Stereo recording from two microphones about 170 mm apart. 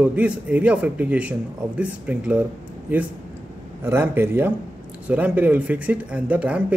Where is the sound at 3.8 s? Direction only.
15° right (ahead or behind).